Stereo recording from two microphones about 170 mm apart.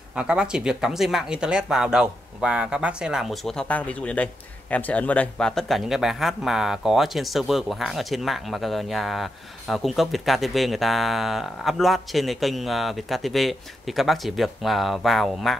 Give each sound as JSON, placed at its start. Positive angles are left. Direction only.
{"t": 0.1, "sound": "speech", "side_deg": -5}